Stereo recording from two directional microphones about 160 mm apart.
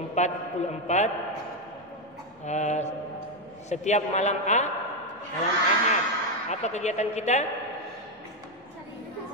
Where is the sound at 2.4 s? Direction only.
45° left (ahead or behind).